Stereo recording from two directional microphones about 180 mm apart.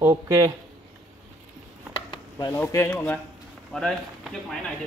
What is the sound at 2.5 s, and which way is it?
A man's voice, 15° left (ahead or behind).